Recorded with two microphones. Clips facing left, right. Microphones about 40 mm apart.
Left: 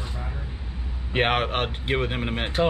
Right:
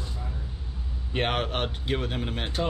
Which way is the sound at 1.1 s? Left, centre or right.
Left.